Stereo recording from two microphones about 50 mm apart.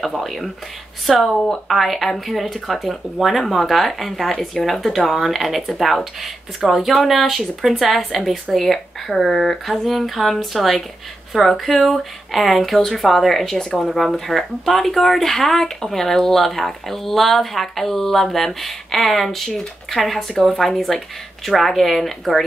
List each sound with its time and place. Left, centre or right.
0.0 s speech: centre